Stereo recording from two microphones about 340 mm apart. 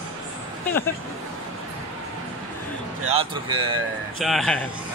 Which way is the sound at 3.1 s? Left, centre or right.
Centre.